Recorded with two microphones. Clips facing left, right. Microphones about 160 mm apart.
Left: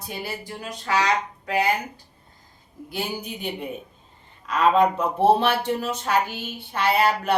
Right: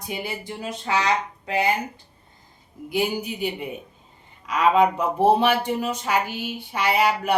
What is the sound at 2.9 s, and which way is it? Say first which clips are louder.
Speech: right 6 dB; 10° right (ahead or behind).